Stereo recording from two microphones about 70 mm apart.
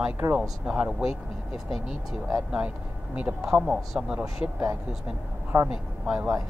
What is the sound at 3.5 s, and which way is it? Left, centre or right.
Speech, centre.